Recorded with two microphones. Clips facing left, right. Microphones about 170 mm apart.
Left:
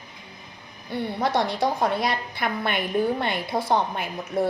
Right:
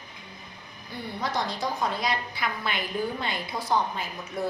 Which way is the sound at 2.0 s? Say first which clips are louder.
Left 3 dB; 60° left (ahead or behind).